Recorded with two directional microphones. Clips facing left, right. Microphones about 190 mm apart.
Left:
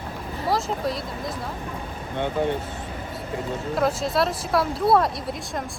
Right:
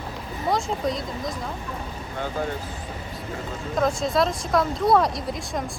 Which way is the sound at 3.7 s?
5° left (ahead or behind).